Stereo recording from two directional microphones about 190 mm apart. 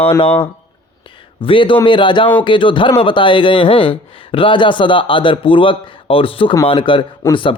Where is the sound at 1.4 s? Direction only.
25° left (ahead or behind).